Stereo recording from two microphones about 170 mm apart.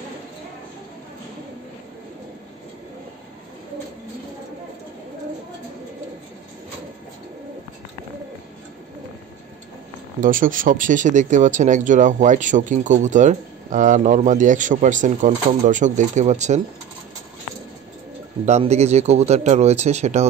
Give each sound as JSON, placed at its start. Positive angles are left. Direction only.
{"t": 10.2, "sound": "speech", "side_deg": -55}
{"t": 18.4, "sound": "speech", "side_deg": -40}